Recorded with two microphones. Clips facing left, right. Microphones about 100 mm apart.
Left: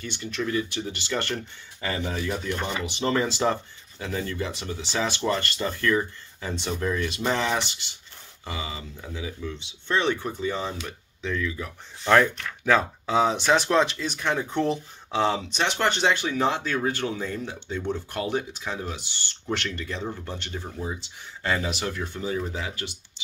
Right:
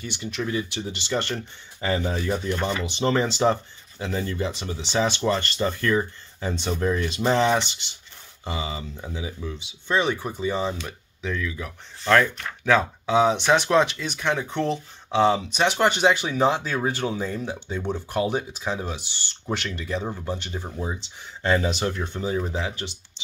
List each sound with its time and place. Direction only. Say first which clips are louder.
0.0 s speech: even; 15° right (ahead or behind)
12.0 s speech: even; 15° left (ahead or behind)
12.6 s speech: right 1 dB; centre (ahead or behind); by 23.2 s 25° right (ahead or behind)